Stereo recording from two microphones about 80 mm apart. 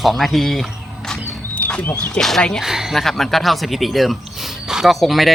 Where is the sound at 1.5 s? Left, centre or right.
Centre.